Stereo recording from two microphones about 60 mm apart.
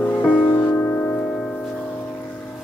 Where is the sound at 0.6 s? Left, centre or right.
Left.